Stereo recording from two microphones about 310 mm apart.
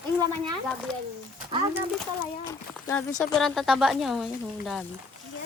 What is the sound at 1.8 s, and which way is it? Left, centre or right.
Speech, centre.